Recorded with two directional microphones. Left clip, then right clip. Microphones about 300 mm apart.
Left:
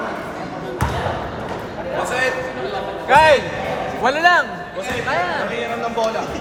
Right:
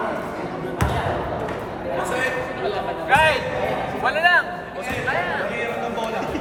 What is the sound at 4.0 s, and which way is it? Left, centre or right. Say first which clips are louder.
Music: left 3 dB; centre.